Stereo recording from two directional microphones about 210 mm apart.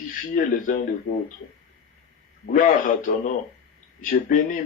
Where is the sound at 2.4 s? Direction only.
40° left (ahead or behind).